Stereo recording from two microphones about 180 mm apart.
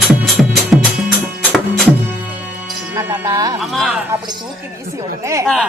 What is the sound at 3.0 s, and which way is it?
Music, 15° right (ahead or behind).